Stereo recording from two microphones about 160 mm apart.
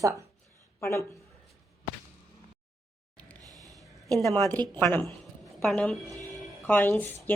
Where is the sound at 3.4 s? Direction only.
20° right (ahead or behind).